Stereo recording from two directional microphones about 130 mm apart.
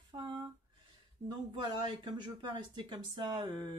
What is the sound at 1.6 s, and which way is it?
Speech, 35° right (ahead or behind).